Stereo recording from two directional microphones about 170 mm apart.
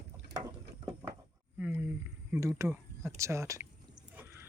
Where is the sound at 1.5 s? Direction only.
10° right (ahead or behind).